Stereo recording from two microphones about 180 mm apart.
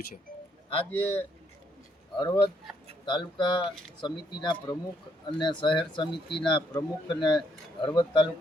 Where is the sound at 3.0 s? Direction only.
25° left (ahead or behind).